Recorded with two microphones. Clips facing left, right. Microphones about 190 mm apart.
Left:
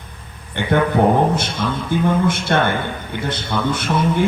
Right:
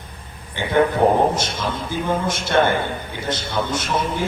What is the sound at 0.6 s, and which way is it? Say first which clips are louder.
A man's voice: left 1 dB; 60° left (ahead or behind).